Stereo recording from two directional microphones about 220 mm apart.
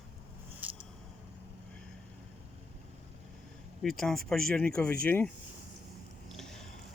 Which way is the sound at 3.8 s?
Centre (ahead or behind).